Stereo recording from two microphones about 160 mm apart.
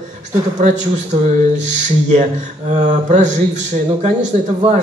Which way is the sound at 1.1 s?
45° right (ahead or behind).